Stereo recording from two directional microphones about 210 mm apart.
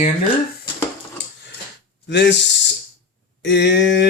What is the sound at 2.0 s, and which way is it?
Speech, 55° left (ahead or behind).